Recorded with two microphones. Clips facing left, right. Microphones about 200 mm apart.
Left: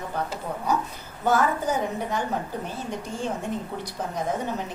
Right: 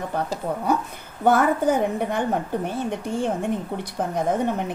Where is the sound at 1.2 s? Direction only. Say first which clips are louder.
Right 4 dB; 55° right (ahead or behind).